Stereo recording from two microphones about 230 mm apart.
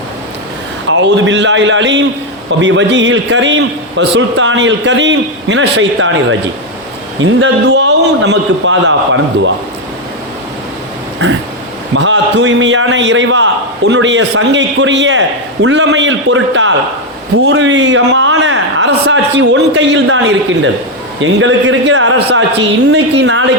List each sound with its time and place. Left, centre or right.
0.9 s a man's voice: right
7.2 s a man's voice: right
11.2 s a man's voice: right